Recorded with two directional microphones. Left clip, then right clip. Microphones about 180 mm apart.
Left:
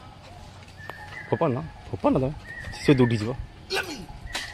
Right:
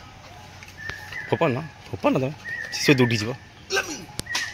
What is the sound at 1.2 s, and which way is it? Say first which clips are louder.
Speech: right 2 dB; 5° right (ahead or behind).